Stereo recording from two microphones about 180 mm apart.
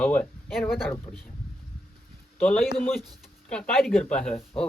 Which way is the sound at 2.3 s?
10° left (ahead or behind).